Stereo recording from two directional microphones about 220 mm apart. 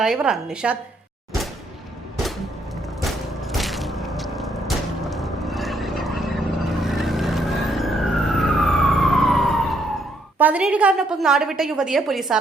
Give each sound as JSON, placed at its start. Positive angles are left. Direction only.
{"t": 0.0, "sound": "a woman's voice", "side_deg": -5}
{"t": 3.6, "sound": "a sound", "side_deg": 0}
{"t": 5.0, "sound": "vehicle", "side_deg": 0}
{"t": 10.3, "sound": "a woman's voice", "side_deg": -5}